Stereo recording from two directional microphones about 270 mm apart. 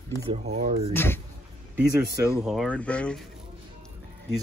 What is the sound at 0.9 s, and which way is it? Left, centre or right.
Speech, centre.